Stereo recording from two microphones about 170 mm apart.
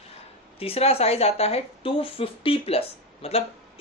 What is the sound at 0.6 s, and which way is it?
Speech, 35° left (ahead or behind).